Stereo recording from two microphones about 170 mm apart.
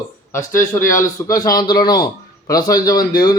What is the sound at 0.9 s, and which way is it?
A man's voice, 20° left (ahead or behind).